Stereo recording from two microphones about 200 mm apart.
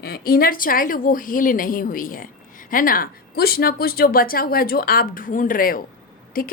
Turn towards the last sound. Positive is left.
turn(degrees=45)  # may be behind; listen again after turning